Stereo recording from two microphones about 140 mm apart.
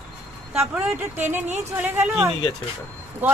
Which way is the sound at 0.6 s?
15° right (ahead or behind).